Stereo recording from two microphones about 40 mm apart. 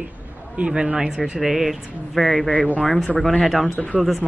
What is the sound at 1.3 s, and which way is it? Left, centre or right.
A woman's voice, centre.